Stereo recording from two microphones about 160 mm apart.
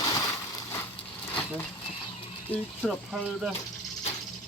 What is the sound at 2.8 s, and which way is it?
Speech, centre (ahead or behind).